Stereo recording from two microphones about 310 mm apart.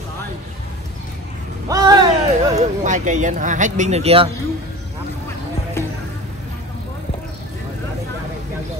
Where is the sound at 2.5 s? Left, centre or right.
Right.